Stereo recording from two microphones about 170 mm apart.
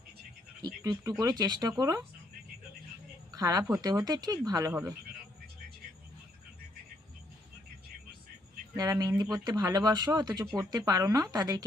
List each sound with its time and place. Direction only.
0.6 s a sound: 20° right (ahead or behind)
1.2 s speech: 25° right (ahead or behind)
3.3 s speech: 20° right (ahead or behind)
8.7 s speech: 20° right (ahead or behind)